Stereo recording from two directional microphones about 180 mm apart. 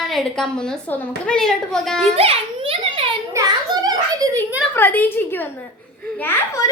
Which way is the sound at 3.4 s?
15° right (ahead or behind).